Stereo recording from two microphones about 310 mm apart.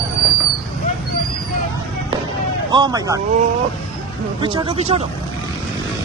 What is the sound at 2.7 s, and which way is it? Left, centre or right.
Speech, centre.